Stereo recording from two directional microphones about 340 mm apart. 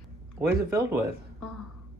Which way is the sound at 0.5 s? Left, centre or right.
Centre.